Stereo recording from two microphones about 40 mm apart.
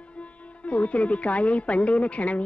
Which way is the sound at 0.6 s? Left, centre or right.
Left.